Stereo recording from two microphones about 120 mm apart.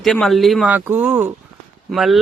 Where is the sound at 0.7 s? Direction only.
15° right (ahead or behind).